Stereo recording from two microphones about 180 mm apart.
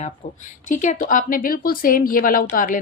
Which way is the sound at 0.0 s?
45° left (ahead or behind).